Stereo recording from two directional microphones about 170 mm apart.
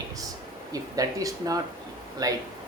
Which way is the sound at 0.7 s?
20° right (ahead or behind).